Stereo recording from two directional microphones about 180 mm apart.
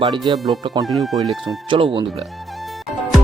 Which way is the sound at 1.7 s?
30° right (ahead or behind).